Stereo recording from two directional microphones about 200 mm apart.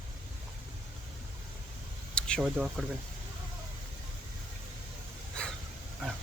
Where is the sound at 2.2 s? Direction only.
5° left (ahead or behind).